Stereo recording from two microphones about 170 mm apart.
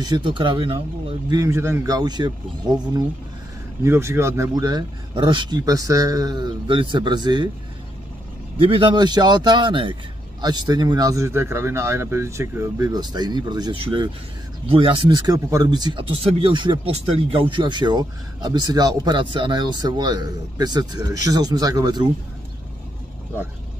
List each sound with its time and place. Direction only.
0.0 s speech: 25° right (ahead or behind)
1.3 s speech: 15° right (ahead or behind)
8.6 s speech: 30° right (ahead or behind)